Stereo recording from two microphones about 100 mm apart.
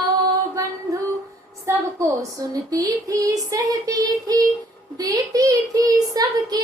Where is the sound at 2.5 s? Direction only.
35° right (ahead or behind).